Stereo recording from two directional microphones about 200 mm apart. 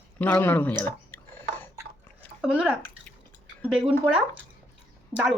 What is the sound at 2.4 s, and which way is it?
A woman's voice, 5° right (ahead or behind).